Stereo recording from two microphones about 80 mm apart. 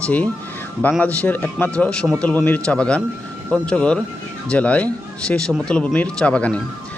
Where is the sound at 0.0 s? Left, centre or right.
Centre.